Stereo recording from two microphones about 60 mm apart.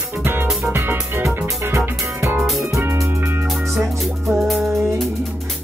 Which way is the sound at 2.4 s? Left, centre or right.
Centre.